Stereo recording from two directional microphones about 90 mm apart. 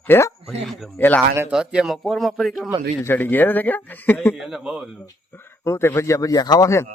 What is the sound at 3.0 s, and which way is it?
A man's voice, 20° left (ahead or behind).